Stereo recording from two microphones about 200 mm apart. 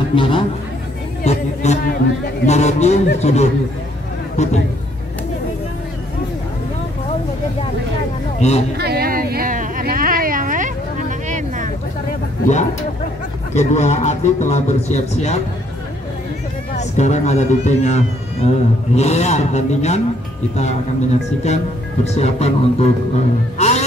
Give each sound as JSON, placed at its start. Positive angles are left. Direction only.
{"t": 0.1, "sound": "a man's voice", "side_deg": 25}
{"t": 8.4, "sound": "speech", "side_deg": 35}
{"t": 8.7, "sound": "a sound", "side_deg": -50}
{"t": 13.6, "sound": "a man's voice", "side_deg": 35}
{"t": 16.7, "sound": "a man's voice", "side_deg": 35}